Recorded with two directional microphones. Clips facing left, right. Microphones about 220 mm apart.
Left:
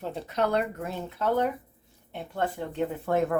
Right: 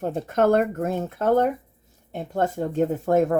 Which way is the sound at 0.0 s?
50° right (ahead or behind).